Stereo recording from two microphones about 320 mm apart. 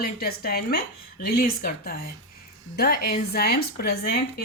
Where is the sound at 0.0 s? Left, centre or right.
Left.